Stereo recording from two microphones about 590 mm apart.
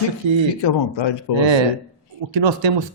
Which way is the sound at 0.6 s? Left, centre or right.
Left.